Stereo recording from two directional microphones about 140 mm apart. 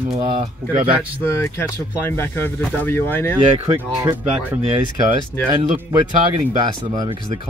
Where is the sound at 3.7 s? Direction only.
15° right (ahead or behind).